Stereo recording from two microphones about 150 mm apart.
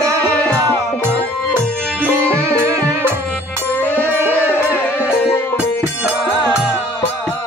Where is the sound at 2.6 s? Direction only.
15° right (ahead or behind).